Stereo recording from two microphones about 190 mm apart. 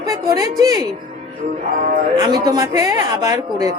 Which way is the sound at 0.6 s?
20° right (ahead or behind).